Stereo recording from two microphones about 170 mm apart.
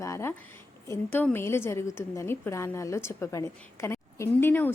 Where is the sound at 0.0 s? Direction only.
15° left (ahead or behind).